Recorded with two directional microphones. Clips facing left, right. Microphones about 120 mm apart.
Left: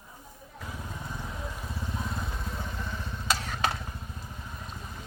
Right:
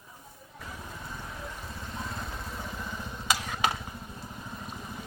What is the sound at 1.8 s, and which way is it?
Vehicle, 5° left (ahead or behind).